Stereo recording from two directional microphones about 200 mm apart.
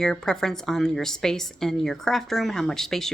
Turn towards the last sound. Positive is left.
turn(degrees=0)  # may be behind; listen again after turning